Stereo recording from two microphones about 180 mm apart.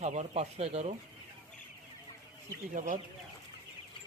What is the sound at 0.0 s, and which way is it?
Speech, 40° right (ahead or behind).